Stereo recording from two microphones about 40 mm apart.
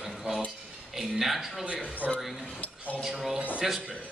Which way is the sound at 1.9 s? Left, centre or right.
Left.